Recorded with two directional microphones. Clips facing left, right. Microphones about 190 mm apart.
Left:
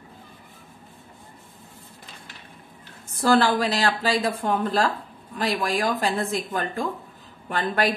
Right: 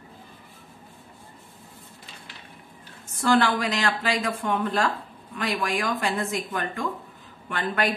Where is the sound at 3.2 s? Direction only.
35° left (ahead or behind).